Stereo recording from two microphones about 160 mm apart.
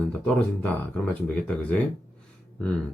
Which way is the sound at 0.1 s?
10° left (ahead or behind).